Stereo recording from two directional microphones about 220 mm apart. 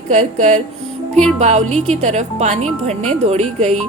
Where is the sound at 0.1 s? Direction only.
30° right (ahead or behind).